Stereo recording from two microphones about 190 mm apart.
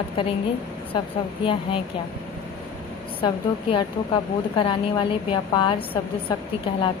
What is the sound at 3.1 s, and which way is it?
A woman's voice, 25° left (ahead or behind).